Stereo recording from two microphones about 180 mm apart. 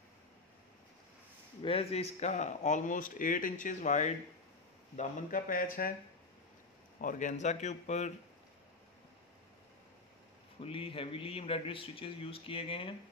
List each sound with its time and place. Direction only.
1.6 s speech: 30° left (ahead or behind); by 5.9 s 55° left (ahead or behind)
7.0 s speech: 45° left (ahead or behind)
10.6 s speech: 30° left (ahead or behind)